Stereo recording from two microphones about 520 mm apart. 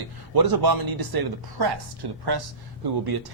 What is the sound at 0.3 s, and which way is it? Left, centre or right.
Speech, right.